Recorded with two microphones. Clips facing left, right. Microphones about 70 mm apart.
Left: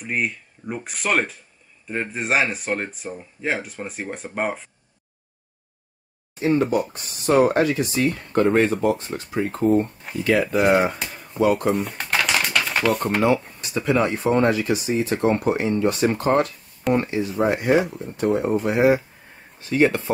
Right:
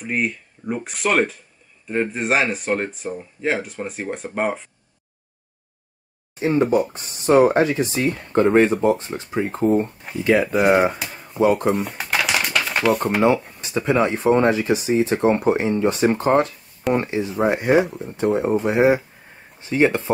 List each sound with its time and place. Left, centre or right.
0.0 s speech: centre
6.6 s speech: right
9.7 s speech: centre
11.0 s a sound: centre
11.6 s typewriter: centre
13.2 s speech: right